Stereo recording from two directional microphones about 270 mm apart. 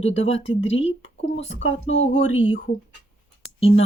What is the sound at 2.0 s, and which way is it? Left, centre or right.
Speech, left.